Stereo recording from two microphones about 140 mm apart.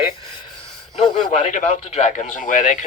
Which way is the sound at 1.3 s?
50° left (ahead or behind).